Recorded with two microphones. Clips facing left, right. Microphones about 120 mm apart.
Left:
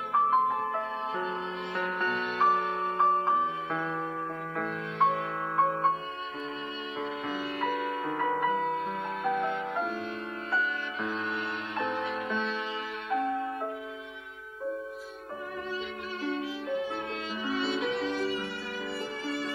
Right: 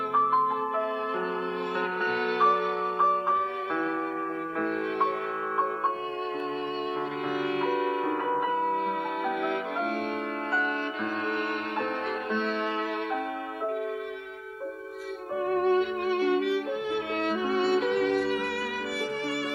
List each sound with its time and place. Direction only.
1.8 s music: 10° right (ahead or behind)
8.0 s music: 5° right (ahead or behind)
9.3 s music: 70° right (ahead or behind)
11.8 s music: 55° right (ahead or behind)
15.5 s music: 60° right (ahead or behind)
17.2 s music: 55° right (ahead or behind)